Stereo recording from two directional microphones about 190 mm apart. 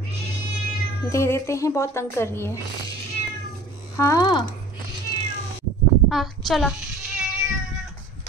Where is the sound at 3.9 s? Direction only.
15° left (ahead or behind).